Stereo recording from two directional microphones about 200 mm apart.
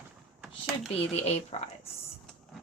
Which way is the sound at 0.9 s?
30° left (ahead or behind).